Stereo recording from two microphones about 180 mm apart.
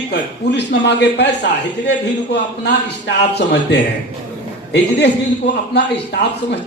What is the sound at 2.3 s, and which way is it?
A man's voice, 70° left (ahead or behind).